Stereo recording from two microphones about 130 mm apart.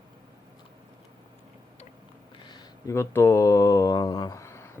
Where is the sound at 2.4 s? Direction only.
35° left (ahead or behind).